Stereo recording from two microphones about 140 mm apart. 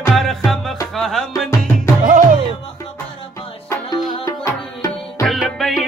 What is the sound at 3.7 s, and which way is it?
Music, 25° left (ahead or behind).